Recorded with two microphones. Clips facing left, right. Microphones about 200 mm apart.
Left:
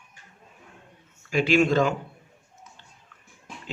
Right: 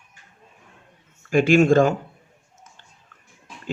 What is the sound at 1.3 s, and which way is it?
Speech, 50° right (ahead or behind).